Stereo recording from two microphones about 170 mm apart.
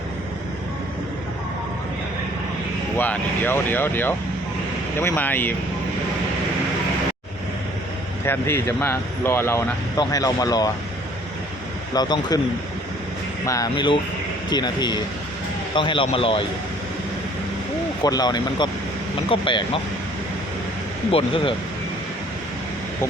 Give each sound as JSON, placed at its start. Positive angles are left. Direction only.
{"t": 3.0, "sound": "speech", "side_deg": 10}
{"t": 8.2, "sound": "speech", "side_deg": 15}
{"t": 11.9, "sound": "speech", "side_deg": 25}
{"t": 13.4, "sound": "speech", "side_deg": 20}
{"t": 18.0, "sound": "speech", "side_deg": 25}
{"t": 21.1, "sound": "speech", "side_deg": 35}